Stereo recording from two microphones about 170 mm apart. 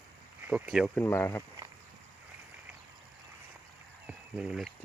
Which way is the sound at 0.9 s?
15° left (ahead or behind).